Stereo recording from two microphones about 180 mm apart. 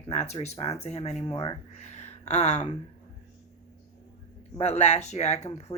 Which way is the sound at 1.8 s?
40° left (ahead or behind).